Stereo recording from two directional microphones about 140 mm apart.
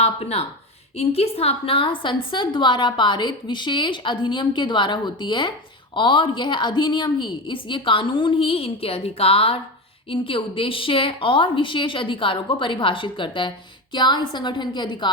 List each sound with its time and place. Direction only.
0.0 s a woman's voice: 45° left (ahead or behind)